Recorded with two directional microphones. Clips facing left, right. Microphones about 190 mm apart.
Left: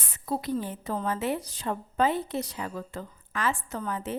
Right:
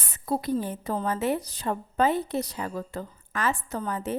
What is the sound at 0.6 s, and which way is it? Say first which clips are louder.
A woman's voice: right 2 dB; 40° right (ahead or behind).